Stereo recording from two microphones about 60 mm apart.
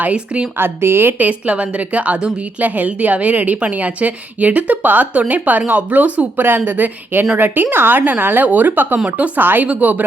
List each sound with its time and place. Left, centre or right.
0.0 s a woman's voice: right
0.5 s speech: right
1.2 s a woman's voice: right